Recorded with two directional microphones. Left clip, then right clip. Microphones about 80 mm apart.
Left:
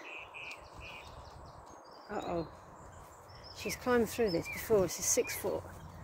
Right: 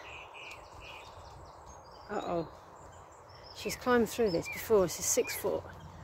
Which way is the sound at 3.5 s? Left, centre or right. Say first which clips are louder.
Right 2 dB; right.